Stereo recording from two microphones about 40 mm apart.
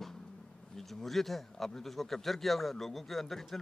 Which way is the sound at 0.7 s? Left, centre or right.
Centre.